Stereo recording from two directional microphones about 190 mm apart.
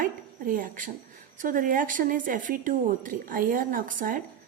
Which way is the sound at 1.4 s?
45° right (ahead or behind).